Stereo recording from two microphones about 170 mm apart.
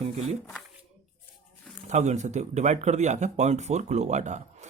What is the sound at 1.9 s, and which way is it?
Speech, 40° right (ahead or behind).